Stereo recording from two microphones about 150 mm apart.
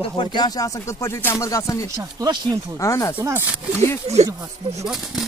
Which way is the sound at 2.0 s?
25° right (ahead or behind).